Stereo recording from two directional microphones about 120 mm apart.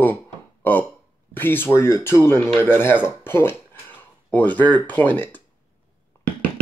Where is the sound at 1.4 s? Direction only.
15° left (ahead or behind).